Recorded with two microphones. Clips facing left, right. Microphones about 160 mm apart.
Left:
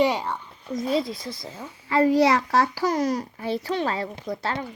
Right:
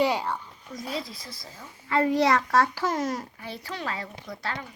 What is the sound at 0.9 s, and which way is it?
Speech, 25° left (ahead or behind).